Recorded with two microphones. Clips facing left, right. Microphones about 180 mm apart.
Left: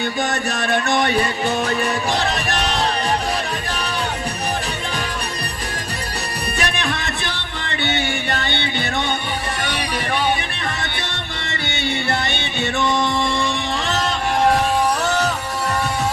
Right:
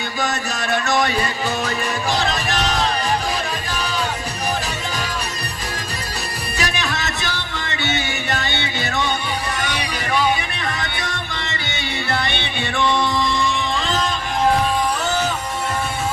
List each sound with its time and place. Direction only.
0.3 s music: 60° left (ahead or behind)
6.6 s music: 60° left (ahead or behind)
12.3 s music: 45° left (ahead or behind)
12.7 s music: 20° left (ahead or behind)
13.2 s music: 55° left (ahead or behind)